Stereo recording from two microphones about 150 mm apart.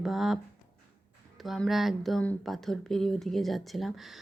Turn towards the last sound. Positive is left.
turn(degrees=0)  # may be behind; listen again after turning